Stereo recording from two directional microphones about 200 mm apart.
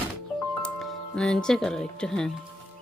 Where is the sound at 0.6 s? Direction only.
5° left (ahead or behind).